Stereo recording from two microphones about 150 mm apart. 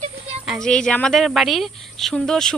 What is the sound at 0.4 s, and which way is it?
Speech, centre (ahead or behind).